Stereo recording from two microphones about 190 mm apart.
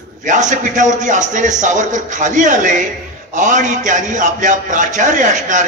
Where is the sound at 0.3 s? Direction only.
40° right (ahead or behind).